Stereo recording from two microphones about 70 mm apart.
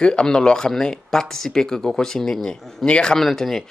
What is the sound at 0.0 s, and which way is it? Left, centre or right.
Speech, centre.